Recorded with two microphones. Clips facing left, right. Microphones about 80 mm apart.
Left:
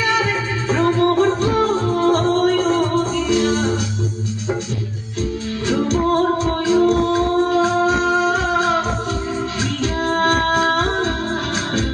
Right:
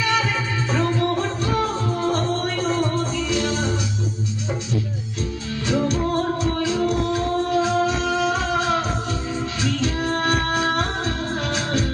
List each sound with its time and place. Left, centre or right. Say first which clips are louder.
0.7 s music: left 6 dB; left
5.6 s music: left 4 dB; left
9.8 s music: left 6 dB; left